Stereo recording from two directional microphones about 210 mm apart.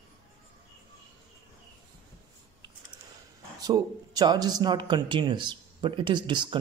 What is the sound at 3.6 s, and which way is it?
Speech, 20° right (ahead or behind).